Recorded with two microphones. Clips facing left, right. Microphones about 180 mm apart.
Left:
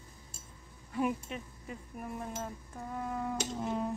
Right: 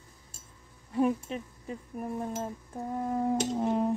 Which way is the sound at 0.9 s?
30° right (ahead or behind).